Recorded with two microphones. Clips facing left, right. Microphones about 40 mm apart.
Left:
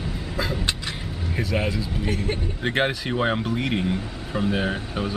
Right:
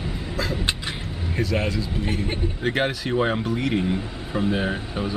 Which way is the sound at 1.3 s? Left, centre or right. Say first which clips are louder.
Right 1 dB; centre.